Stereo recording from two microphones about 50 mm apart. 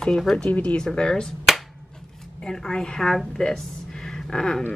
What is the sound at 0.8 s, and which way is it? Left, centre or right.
Speech, centre.